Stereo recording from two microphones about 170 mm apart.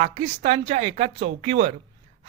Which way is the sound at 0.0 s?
45° right (ahead or behind).